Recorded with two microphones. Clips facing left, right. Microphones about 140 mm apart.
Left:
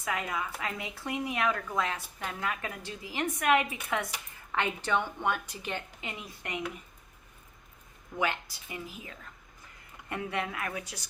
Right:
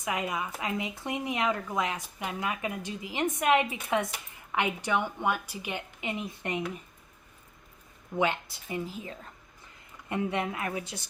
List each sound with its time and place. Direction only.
0.0 s a woman's voice: 20° right (ahead or behind)
8.1 s speech: 25° right (ahead or behind)